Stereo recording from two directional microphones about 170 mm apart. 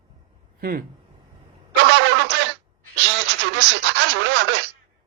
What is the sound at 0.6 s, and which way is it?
Speech, 60° right (ahead or behind).